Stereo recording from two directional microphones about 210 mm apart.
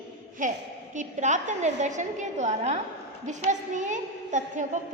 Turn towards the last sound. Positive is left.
turn(degrees=-35)  # may be behind; listen again after turning